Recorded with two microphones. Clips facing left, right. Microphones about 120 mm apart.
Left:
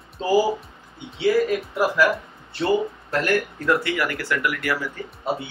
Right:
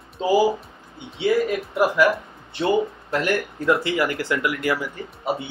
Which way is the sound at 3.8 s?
25° right (ahead or behind).